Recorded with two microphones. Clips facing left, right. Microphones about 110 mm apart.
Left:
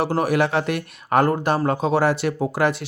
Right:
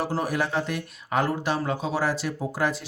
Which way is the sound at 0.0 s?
70° left (ahead or behind).